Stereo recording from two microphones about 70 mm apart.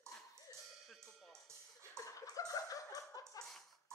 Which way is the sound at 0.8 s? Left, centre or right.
Centre.